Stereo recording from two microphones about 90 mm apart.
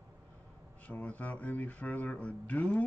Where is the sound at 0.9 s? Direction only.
15° left (ahead or behind).